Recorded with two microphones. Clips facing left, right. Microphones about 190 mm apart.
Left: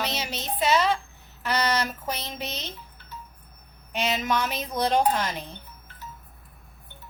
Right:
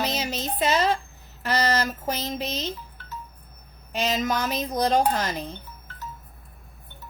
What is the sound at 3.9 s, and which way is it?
A woman's voice, 40° right (ahead or behind).